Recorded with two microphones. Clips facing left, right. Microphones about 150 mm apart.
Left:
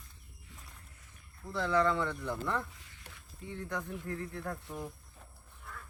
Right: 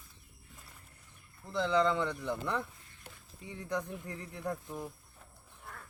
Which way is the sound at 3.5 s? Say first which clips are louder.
Right 2 dB; 15° right (ahead or behind).